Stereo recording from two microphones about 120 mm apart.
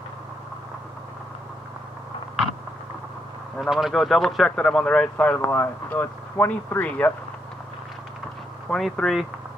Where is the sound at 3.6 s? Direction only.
Centre (ahead or behind); by 7.1 s 15° left (ahead or behind).